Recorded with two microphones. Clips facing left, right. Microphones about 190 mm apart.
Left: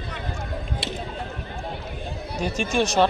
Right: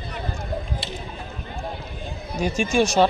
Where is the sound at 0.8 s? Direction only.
75° left (ahead or behind).